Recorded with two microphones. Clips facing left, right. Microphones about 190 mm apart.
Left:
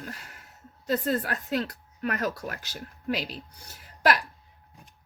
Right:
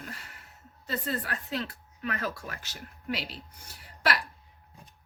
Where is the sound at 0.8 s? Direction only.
45° left (ahead or behind).